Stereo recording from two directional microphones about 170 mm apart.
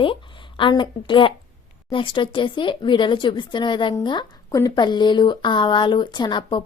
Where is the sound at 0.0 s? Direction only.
30° left (ahead or behind).